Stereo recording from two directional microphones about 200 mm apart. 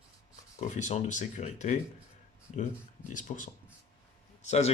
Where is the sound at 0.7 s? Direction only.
35° left (ahead or behind).